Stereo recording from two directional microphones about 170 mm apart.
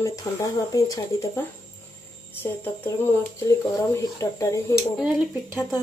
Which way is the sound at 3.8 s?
20° left (ahead or behind).